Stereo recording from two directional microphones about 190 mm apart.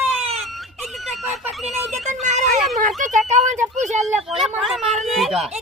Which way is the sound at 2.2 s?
40° right (ahead or behind).